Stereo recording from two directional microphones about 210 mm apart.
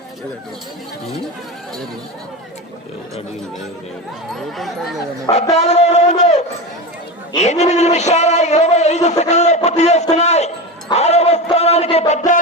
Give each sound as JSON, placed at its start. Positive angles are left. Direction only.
{"t": 4.4, "sound": "speech", "side_deg": 0}
{"t": 5.2, "sound": "a man's voice", "side_deg": 30}
{"t": 9.6, "sound": "a sound", "side_deg": 30}
{"t": 10.9, "sound": "music", "side_deg": 30}